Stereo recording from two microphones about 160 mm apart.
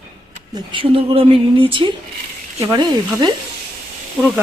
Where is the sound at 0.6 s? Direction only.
30° right (ahead or behind).